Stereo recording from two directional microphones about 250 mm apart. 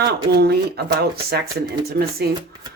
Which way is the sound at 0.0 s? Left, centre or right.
Right.